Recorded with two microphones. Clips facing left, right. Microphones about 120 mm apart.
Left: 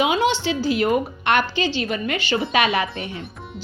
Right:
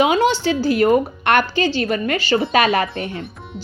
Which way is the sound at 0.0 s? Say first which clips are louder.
Right 4 dB; 45° right (ahead or behind).